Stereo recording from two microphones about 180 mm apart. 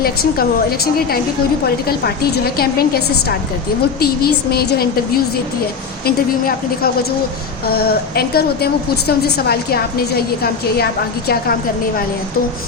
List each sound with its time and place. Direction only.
0.0 s a woman's voice: 55° left (ahead or behind)
1.9 s a woman's voice: 60° left (ahead or behind)